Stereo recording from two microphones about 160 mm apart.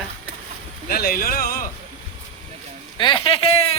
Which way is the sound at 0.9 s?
70° left (ahead or behind).